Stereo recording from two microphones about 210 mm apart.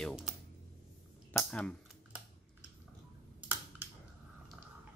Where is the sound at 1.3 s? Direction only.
5° left (ahead or behind).